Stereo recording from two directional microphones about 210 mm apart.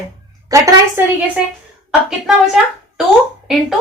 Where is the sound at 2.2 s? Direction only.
Centre (ahead or behind).